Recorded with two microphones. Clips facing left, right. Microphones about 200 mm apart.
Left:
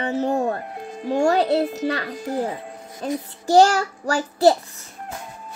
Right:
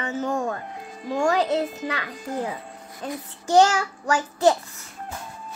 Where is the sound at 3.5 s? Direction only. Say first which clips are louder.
Left 3 dB; 40° left (ahead or behind).